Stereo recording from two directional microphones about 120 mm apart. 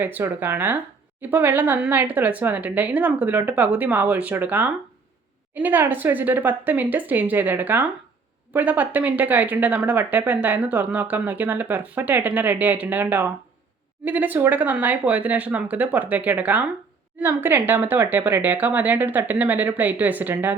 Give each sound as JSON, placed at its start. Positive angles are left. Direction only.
{"t": 0.0, "sound": "speech", "side_deg": -15}